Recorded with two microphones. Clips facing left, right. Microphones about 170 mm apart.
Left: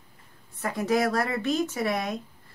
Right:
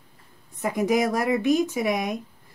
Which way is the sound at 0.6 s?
15° right (ahead or behind).